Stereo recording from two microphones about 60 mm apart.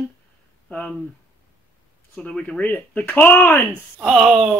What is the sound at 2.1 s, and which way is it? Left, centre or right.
Speech, left.